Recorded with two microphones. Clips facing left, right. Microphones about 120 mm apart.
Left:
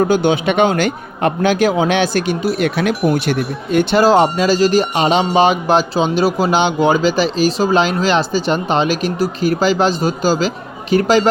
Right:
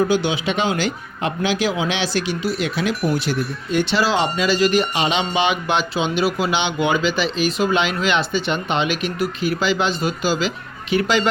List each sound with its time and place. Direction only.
0.0 s a man's voice: 50° left (ahead or behind)